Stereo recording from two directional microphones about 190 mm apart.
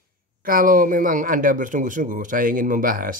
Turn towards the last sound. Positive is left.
turn(degrees=-45)  # may be behind; listen again after turning